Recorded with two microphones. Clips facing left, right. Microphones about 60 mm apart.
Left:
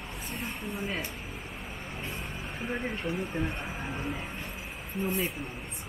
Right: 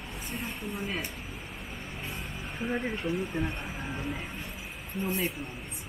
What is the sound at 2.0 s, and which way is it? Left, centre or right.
Speech, centre.